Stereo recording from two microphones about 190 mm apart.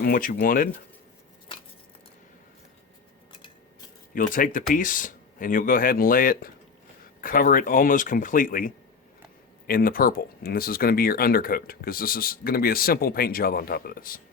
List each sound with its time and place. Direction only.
0.0 s speech: 50° left (ahead or behind)
4.1 s speech: 45° left (ahead or behind)